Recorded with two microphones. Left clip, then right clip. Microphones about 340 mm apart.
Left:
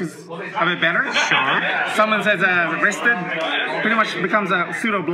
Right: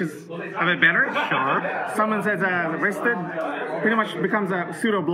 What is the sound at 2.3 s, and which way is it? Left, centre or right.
Speech, right.